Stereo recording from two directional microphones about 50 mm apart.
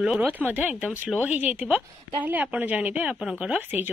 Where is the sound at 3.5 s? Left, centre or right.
Right.